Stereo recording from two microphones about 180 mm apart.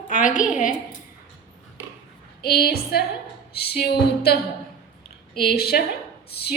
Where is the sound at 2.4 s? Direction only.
60° left (ahead or behind).